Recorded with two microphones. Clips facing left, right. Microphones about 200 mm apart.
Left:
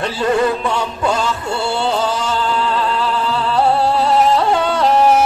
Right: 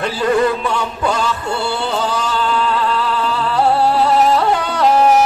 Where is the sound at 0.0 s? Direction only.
25° left (ahead or behind).